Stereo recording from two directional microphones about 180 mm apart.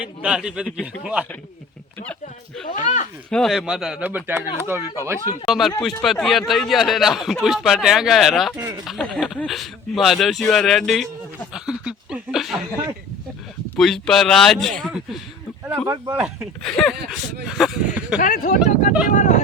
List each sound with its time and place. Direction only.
0.2 s speech: 5° right (ahead or behind)
2.8 s speech: 40° left (ahead or behind)
3.2 s speech: 5° left (ahead or behind); by 5.2 s 15° right (ahead or behind)
5.5 s speech: centre (ahead or behind)
8.5 s speech: 20° right (ahead or behind)
8.9 s speech: centre (ahead or behind)
13.7 s speech: centre (ahead or behind)
15.6 s speech: 15° right (ahead or behind)
16.2 s speech: centre (ahead or behind)
18.2 s speech: 45° left (ahead or behind)